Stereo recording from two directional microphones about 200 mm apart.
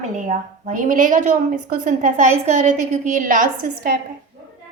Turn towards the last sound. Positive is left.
turn(degrees=-40)  # may be behind; listen again after turning